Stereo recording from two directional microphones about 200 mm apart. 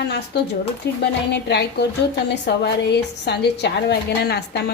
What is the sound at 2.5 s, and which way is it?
Speech, 55° left (ahead or behind).